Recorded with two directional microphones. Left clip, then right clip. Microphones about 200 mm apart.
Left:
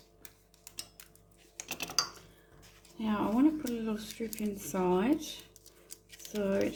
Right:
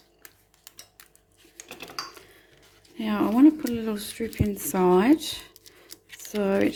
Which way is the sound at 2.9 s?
45° right (ahead or behind).